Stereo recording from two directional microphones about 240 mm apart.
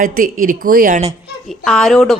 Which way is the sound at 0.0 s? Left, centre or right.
Right.